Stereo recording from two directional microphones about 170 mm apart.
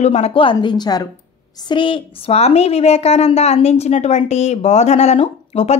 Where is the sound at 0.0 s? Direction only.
40° left (ahead or behind).